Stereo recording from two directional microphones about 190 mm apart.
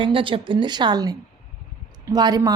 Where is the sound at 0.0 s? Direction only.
25° right (ahead or behind).